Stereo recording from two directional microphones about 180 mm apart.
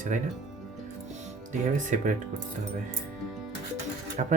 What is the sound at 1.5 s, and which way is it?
Speech, 45° right (ahead or behind).